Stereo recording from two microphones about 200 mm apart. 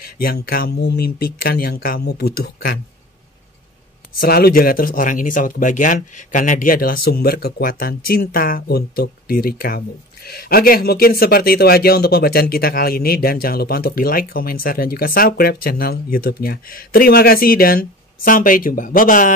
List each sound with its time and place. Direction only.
0.0 s speech: 50° left (ahead or behind)
4.1 s speech: 50° left (ahead or behind)